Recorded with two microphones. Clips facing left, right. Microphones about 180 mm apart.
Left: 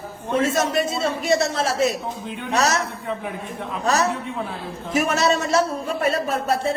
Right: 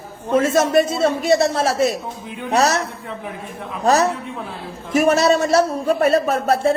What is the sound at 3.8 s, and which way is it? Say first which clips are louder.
Speech: right 5 dB; 35° right (ahead or behind).